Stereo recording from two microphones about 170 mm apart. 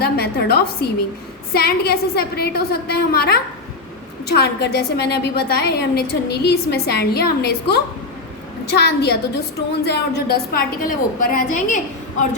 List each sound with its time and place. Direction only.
0.0 s a woman's voice: 65° left (ahead or behind); by 11.8 s 45° left (ahead or behind)